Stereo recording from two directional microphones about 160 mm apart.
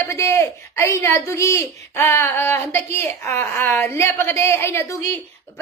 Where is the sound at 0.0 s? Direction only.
15° left (ahead or behind).